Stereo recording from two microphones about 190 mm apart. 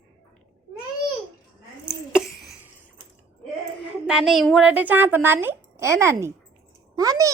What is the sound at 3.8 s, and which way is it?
A woman's voice, 5° right (ahead or behind).